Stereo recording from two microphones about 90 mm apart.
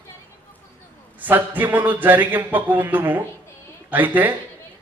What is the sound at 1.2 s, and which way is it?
Speech, 20° right (ahead or behind).